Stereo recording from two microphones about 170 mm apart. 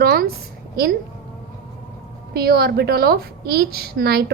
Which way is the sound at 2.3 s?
65° right (ahead or behind).